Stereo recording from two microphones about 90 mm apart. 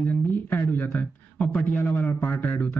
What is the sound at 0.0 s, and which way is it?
Speech, 20° left (ahead or behind).